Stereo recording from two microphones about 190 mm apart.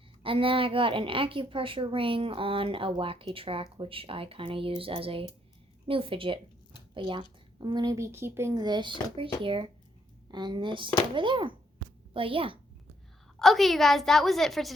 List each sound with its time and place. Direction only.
0.2 s a woman's voice: 30° right (ahead or behind)
13.4 s a woman's voice: centre (ahead or behind)